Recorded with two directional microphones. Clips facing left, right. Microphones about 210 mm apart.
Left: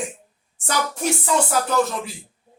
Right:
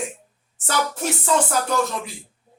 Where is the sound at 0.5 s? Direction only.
15° left (ahead or behind).